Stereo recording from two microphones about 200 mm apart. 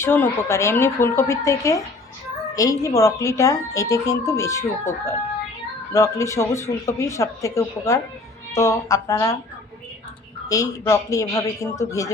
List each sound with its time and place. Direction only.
0.0 s a woman's voice: 10° left (ahead or behind)
10.5 s a woman's voice: 15° left (ahead or behind)